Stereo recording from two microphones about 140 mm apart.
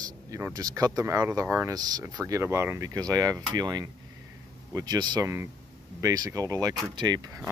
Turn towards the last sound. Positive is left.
turn(degrees=-30)  # may be behind; listen again after turning